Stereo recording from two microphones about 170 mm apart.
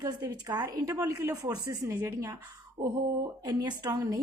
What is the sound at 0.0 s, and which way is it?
A woman's voice, 25° right (ahead or behind).